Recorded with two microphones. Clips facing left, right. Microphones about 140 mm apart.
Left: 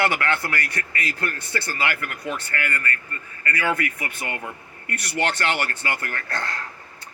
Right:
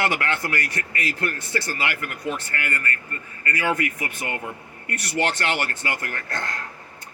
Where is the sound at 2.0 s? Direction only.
40° right (ahead or behind).